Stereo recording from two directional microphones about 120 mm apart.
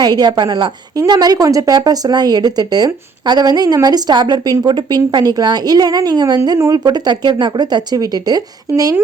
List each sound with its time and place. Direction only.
0.0 s a woman's voice: 35° right (ahead or behind)